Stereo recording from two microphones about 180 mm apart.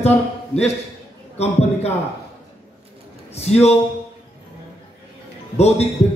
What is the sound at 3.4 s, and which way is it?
Speech, 35° left (ahead or behind).